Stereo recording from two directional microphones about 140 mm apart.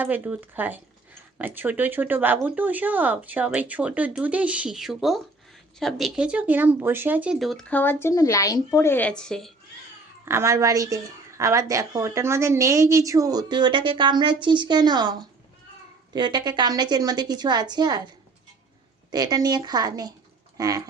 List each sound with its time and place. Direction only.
0.0 s speech: 10° right (ahead or behind)
7.3 s speech: centre (ahead or behind)
10.2 s a woman's voice: 20° right (ahead or behind)
19.1 s a woman's voice: 30° right (ahead or behind)